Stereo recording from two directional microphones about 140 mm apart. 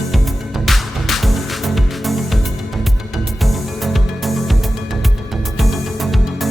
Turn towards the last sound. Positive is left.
turn(degrees=0)  # may be behind; listen again after turning